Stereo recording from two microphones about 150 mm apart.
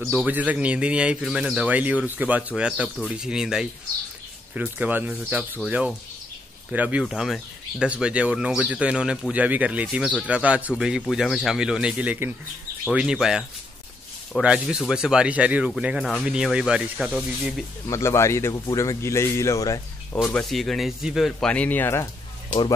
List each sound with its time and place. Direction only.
0.0 s a man's voice: 10° right (ahead or behind)
17.8 s a man's voice: 20° left (ahead or behind)
20.4 s speech: centre (ahead or behind)